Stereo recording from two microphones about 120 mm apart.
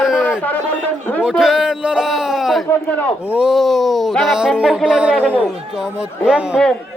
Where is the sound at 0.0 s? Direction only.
5° right (ahead or behind).